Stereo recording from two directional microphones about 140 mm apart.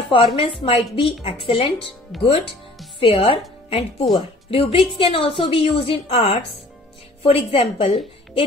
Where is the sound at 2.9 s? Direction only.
40° left (ahead or behind).